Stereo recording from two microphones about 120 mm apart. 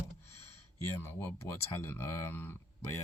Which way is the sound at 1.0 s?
20° left (ahead or behind).